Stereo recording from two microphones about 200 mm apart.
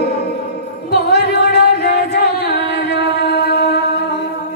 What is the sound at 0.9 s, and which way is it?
Music, 55° left (ahead or behind).